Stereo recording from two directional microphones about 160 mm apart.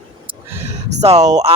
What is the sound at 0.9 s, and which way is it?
Speech, 45° right (ahead or behind).